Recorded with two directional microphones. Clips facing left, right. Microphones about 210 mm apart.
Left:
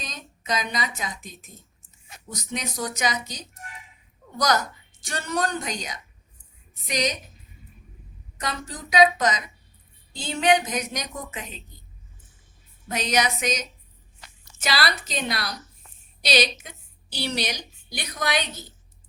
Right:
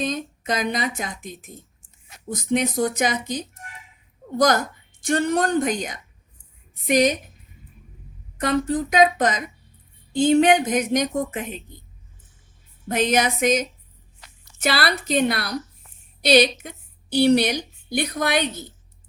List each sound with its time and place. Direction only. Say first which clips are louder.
0.0 s speech: right 13 dB; 55° right (ahead or behind)
8.4 s speech: right 12 dB; 55° right (ahead or behind)
12.9 s a woman's voice: right 4 dB; 50° right (ahead or behind)